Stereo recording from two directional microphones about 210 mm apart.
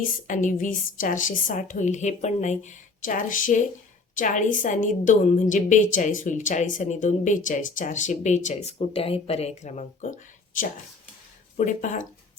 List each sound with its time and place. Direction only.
0.3 s a woman's voice: 40° left (ahead or behind)
11.5 s a woman's voice: 35° left (ahead or behind)